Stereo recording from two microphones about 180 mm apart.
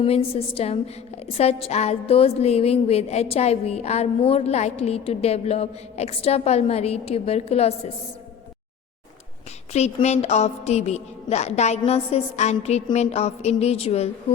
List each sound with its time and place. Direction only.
0.0 s a woman's voice: 30° left (ahead or behind)
9.7 s a woman's voice: 40° left (ahead or behind)